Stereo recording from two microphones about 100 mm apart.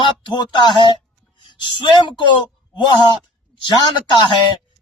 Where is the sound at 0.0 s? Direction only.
50° left (ahead or behind).